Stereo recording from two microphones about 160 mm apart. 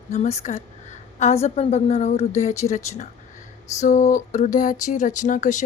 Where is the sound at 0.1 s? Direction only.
45° left (ahead or behind).